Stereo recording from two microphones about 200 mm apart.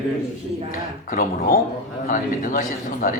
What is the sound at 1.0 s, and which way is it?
A man's voice, 45° left (ahead or behind).